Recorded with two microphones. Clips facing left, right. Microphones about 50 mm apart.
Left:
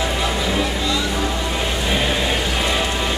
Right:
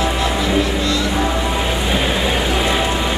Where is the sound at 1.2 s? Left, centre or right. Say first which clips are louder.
Right 4 dB; centre.